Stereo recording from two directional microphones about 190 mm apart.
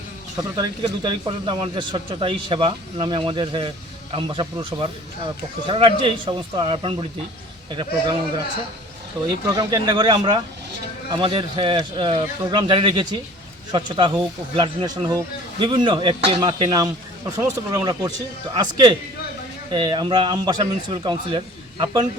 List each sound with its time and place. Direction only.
0.3 s speech: 20° right (ahead or behind)
9.5 s speech: 20° right (ahead or behind)